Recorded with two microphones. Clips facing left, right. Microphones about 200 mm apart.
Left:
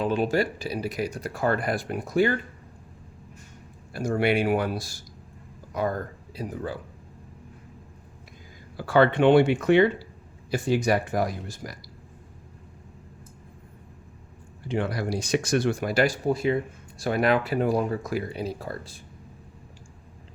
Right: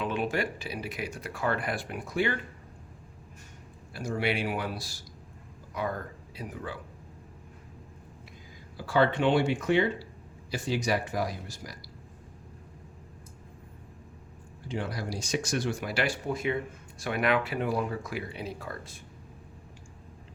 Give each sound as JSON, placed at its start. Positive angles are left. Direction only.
{"t": 0.0, "sound": "speech", "side_deg": 35}
{"t": 3.9, "sound": "speech", "side_deg": 50}
{"t": 8.8, "sound": "speech", "side_deg": 60}
{"t": 10.5, "sound": "speech", "side_deg": 50}
{"t": 14.7, "sound": "speech", "side_deg": 65}